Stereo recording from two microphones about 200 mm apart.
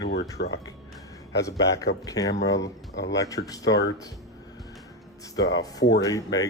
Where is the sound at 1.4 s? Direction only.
15° left (ahead or behind).